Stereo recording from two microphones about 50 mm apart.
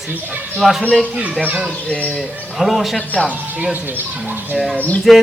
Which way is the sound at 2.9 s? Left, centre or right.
Centre.